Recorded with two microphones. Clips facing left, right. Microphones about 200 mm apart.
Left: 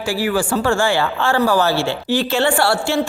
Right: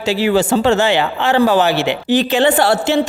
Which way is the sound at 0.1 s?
25° right (ahead or behind).